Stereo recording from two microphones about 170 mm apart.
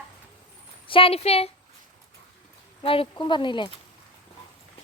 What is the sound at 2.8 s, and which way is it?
Speech, 35° left (ahead or behind).